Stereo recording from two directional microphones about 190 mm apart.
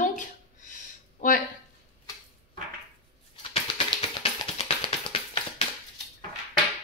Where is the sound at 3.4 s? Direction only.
25° left (ahead or behind).